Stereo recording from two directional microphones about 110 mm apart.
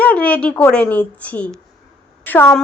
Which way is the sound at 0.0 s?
10° left (ahead or behind).